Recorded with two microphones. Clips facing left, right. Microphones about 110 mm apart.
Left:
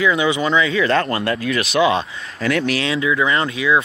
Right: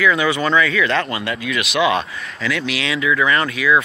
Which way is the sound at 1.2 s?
40° left (ahead or behind).